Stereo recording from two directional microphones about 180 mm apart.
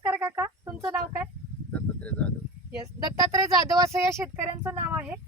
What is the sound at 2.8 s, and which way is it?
Speech, 20° right (ahead or behind).